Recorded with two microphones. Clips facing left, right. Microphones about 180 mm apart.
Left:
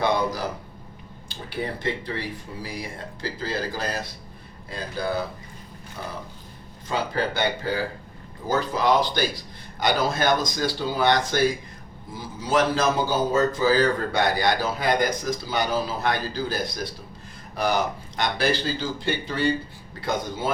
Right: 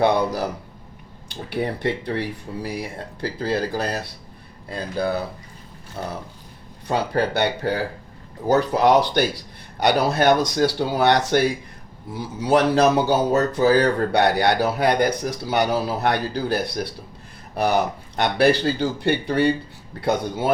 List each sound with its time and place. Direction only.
0.0 s a sound: 60° right (ahead or behind)
1.5 s speech: 65° right (ahead or behind)
6.0 s speech: 65° right (ahead or behind)